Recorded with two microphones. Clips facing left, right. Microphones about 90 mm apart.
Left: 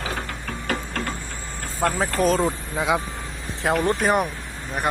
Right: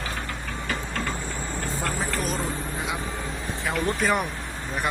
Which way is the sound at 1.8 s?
60° left (ahead or behind).